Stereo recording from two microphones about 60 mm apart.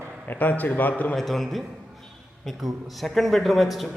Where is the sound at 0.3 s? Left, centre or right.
Left.